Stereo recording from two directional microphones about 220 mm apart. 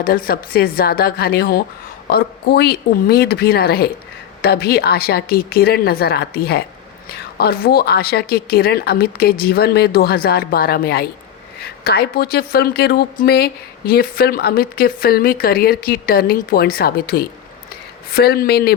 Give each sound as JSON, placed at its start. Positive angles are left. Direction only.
{"t": 0.0, "sound": "a woman's voice", "side_deg": 40}